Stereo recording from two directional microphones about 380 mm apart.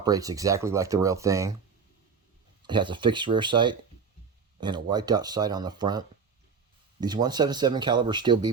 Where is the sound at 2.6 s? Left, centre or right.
Centre.